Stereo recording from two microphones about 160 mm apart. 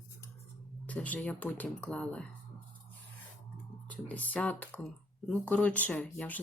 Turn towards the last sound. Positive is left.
turn(degrees=10)  # may be behind; listen again after turning